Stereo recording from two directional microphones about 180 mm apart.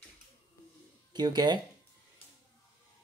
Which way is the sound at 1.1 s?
25° right (ahead or behind).